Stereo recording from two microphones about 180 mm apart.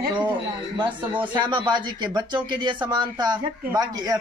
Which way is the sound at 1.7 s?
25° right (ahead or behind).